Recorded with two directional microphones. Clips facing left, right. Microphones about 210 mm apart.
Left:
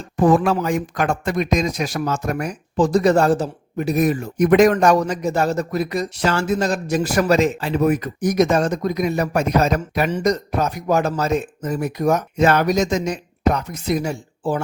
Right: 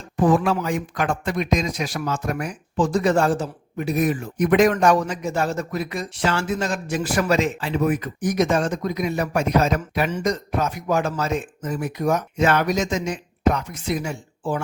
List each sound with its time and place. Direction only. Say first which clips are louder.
0.2 s speech: left 3 dB; 45° left (ahead or behind)